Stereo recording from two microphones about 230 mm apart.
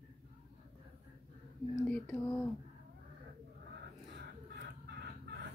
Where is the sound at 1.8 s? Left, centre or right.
Centre.